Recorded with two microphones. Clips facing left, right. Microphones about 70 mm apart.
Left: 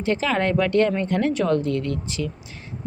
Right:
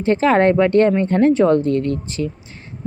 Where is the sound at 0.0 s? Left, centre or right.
Right.